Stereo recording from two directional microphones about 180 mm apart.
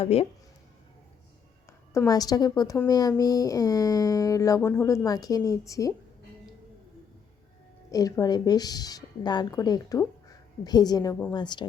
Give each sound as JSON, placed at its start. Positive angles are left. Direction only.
{"t": 0.0, "sound": "speech", "side_deg": 35}
{"t": 1.9, "sound": "a woman's voice", "side_deg": 20}
{"t": 7.9, "sound": "a woman's voice", "side_deg": 20}